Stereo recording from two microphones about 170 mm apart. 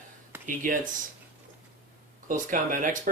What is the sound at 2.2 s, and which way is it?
Speech, 50° right (ahead or behind).